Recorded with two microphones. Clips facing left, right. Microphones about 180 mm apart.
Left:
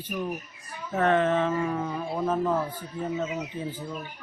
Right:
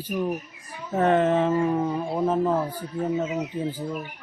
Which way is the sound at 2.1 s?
20° right (ahead or behind).